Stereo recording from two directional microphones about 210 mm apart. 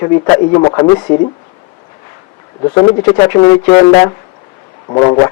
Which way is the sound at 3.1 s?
20° left (ahead or behind).